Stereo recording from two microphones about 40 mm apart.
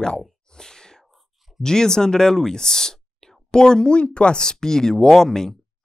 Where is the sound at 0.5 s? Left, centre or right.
Centre.